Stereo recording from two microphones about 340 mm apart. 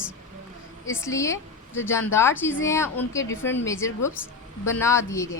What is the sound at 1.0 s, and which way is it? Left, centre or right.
A woman's voice, centre.